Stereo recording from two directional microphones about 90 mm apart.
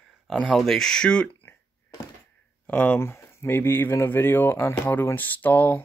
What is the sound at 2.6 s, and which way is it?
Speech, 20° left (ahead or behind).